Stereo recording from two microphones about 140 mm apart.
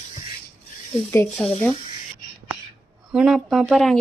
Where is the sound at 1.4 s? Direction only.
5° left (ahead or behind).